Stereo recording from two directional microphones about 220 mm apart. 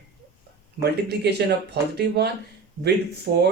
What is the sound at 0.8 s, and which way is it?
Speech, 50° right (ahead or behind).